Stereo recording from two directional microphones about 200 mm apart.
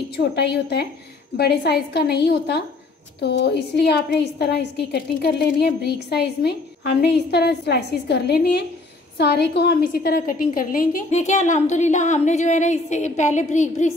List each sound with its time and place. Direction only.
0.2 s a woman's voice: 55° left (ahead or behind); by 13.9 s 35° left (ahead or behind)